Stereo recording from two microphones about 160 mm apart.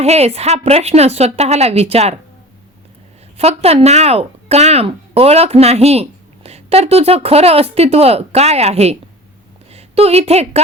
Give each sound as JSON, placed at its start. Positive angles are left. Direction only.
{"t": 0.0, "sound": "speech", "side_deg": -40}
{"t": 3.3, "sound": "a woman's voice", "side_deg": -40}